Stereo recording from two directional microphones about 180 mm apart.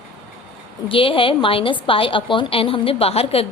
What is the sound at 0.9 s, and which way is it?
A woman's voice, 30° left (ahead or behind).